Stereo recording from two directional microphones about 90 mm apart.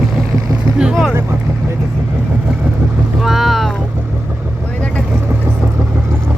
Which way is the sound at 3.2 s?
Centre (ahead or behind).